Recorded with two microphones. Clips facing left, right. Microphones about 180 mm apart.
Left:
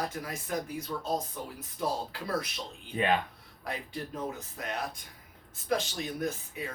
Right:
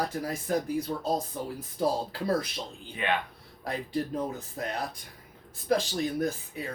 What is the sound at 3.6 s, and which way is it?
Speech, 35° right (ahead or behind).